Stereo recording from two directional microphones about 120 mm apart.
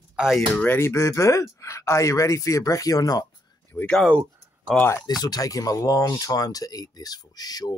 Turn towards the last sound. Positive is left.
turn(degrees=35)  # may be behind; listen again after turning